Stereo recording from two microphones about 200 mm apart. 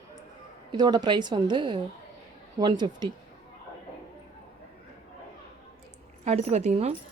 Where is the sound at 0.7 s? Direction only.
20° right (ahead or behind).